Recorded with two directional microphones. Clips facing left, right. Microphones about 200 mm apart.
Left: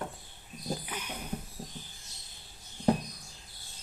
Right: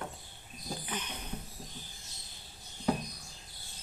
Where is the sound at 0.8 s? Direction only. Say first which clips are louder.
Right 1 dB; 10° left (ahead or behind).